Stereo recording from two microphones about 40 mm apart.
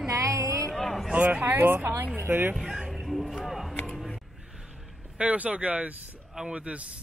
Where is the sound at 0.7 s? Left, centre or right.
Centre.